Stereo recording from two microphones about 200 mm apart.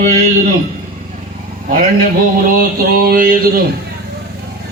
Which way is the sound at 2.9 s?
45° right (ahead or behind).